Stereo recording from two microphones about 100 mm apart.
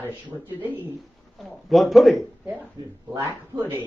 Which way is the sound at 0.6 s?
20° right (ahead or behind).